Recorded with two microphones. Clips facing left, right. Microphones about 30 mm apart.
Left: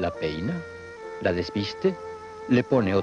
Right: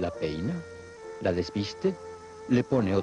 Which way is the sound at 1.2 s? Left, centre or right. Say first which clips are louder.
Left 2 dB; left.